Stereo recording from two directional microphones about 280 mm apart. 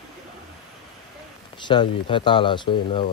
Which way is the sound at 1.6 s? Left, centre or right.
Centre.